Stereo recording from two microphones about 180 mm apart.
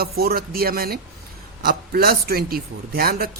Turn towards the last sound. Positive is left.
turn(degrees=-60)  # may be behind; listen again after turning